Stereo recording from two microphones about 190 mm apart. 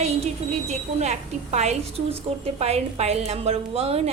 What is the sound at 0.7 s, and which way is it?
A woman's voice, 35° right (ahead or behind).